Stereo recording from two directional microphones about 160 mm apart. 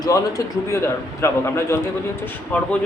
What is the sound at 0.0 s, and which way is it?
A man's voice, 20° left (ahead or behind).